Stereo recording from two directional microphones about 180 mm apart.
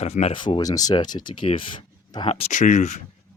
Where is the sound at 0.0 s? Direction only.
35° left (ahead or behind).